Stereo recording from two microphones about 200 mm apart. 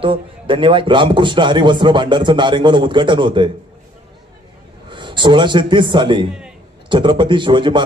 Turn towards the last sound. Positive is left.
turn(degrees=-25)  # may be behind; listen again after turning